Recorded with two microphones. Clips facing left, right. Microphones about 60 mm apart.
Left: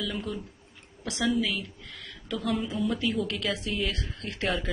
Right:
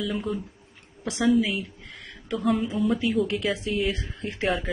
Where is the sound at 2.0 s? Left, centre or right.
Right.